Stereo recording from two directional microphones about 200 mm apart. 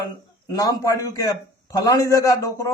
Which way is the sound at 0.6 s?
15° left (ahead or behind).